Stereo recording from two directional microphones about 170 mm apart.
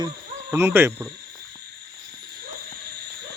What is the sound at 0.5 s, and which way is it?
Owl, 15° right (ahead or behind).